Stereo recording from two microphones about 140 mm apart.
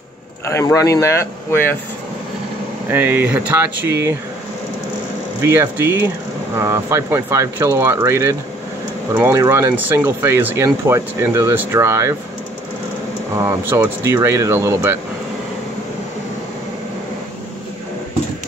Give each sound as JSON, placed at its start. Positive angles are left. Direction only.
{"t": 0.5, "sound": "speech", "side_deg": 20}
{"t": 2.9, "sound": "speech", "side_deg": -15}
{"t": 5.4, "sound": "speech", "side_deg": -20}
{"t": 13.4, "sound": "speech", "side_deg": -15}